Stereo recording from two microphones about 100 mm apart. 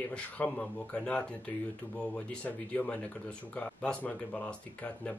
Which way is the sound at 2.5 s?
15° left (ahead or behind).